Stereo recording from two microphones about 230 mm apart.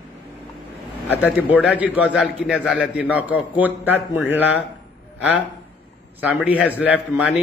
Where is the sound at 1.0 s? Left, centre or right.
Centre.